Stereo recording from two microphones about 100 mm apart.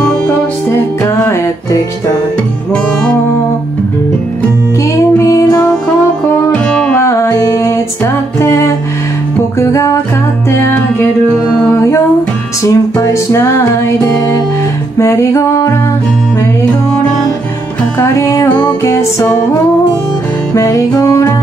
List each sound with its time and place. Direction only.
1.2 s music: 30° left (ahead or behind)
4.9 s music: 35° left (ahead or behind)
6.5 s music: 10° left (ahead or behind)
7.0 s music: 30° left (ahead or behind)
17.9 s music: 30° left (ahead or behind)